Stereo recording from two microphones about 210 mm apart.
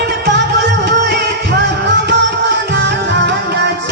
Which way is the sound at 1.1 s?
55° right (ahead or behind).